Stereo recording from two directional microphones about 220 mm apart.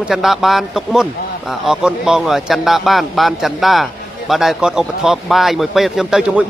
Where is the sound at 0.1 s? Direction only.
Centre (ahead or behind).